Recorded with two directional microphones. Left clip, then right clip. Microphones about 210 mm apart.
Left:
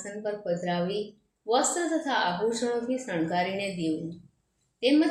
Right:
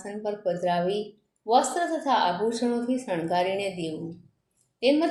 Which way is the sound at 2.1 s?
25° right (ahead or behind).